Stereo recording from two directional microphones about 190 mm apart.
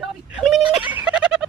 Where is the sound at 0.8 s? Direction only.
25° left (ahead or behind).